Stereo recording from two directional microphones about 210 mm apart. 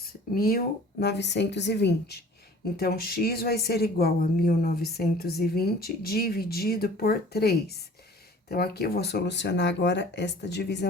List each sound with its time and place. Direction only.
0.1 s speech: 45° left (ahead or behind)